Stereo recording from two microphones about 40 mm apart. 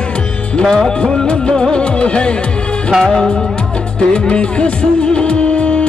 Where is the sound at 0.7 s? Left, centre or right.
Centre.